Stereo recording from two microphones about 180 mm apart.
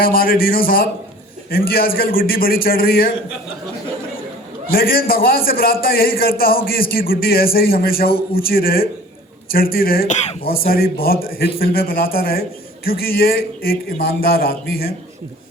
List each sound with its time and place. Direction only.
0.0 s a man's voice: 55° left (ahead or behind)
4.7 s a man's voice: 55° left (ahead or behind)